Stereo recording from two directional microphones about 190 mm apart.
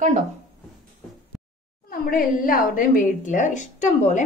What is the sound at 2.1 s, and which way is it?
A woman's voice, 50° left (ahead or behind).